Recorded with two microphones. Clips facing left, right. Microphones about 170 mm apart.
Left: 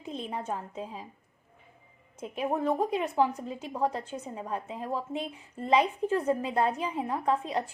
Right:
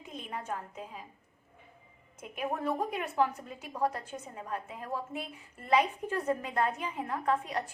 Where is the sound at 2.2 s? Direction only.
30° left (ahead or behind).